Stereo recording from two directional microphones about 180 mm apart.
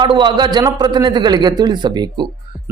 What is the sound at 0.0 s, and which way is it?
A man's voice, 25° right (ahead or behind).